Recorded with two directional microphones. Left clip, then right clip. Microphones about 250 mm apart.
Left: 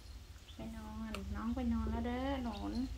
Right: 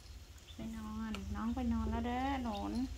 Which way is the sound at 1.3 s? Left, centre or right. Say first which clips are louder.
Right 1 dB; right.